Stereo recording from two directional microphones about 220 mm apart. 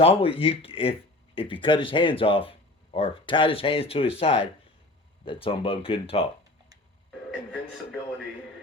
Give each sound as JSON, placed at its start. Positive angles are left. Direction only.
{"t": 0.0, "sound": "speech", "side_deg": 25}